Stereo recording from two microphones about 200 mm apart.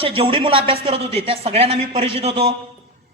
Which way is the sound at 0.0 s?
25° right (ahead or behind).